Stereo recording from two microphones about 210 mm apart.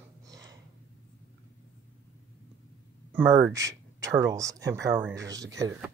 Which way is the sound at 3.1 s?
10° right (ahead or behind).